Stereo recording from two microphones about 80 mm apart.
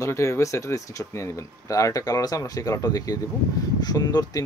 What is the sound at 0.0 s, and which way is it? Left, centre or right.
Speech, left.